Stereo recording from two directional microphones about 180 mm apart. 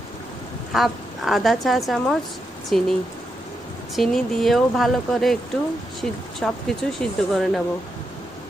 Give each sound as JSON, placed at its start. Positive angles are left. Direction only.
{"t": 0.7, "sound": "speech", "side_deg": 0}
{"t": 3.9, "sound": "speech", "side_deg": 0}